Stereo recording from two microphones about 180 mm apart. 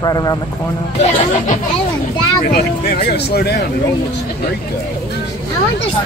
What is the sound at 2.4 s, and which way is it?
Speech, 60° left (ahead or behind).